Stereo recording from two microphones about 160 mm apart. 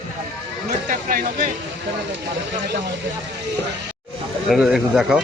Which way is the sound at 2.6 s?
90° right.